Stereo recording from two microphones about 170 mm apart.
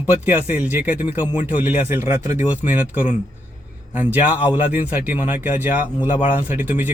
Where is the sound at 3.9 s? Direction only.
10° right (ahead or behind).